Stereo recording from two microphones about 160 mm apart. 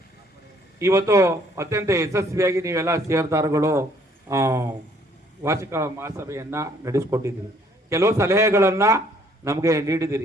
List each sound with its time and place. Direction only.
0.8 s a man's voice: 20° right (ahead or behind)